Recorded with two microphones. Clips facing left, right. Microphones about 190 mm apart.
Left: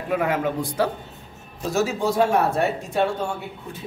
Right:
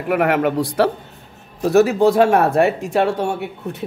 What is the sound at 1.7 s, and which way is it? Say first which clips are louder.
Speech: right 9 dB; 65° right (ahead or behind).